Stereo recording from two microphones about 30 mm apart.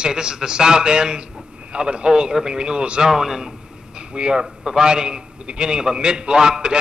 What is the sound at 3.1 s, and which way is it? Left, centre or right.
A man's voice, centre.